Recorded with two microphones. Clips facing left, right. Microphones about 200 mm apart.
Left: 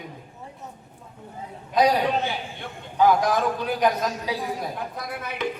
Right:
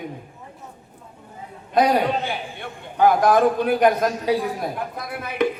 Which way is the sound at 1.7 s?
55° right (ahead or behind).